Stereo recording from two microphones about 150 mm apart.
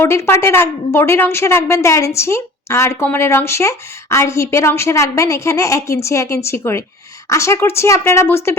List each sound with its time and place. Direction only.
0.0 s a woman's voice: 15° left (ahead or behind)